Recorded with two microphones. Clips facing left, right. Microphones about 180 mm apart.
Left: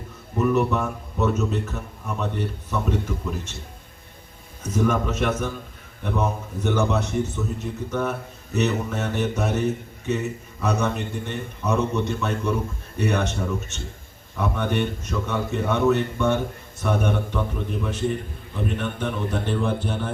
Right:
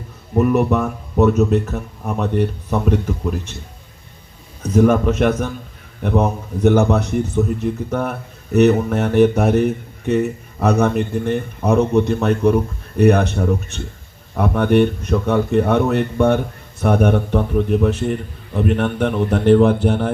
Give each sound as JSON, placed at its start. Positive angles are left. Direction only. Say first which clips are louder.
{"t": 0.3, "sound": "a man's voice", "louder": "right 6 dB", "side_deg": -60}
{"t": 4.7, "sound": "a man's voice", "louder": "right 9 dB", "side_deg": -60}